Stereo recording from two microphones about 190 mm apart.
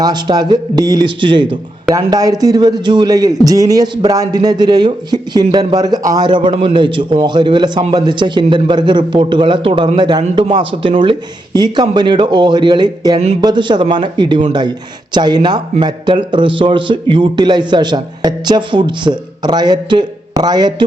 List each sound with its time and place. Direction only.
0.0 s a man's voice: 20° right (ahead or behind)